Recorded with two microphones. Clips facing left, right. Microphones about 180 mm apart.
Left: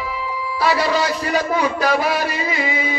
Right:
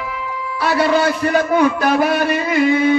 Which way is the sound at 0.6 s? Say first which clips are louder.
Right 3 dB; 55° right (ahead or behind).